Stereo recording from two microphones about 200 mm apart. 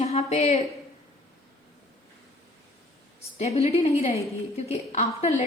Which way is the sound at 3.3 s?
30° left (ahead or behind).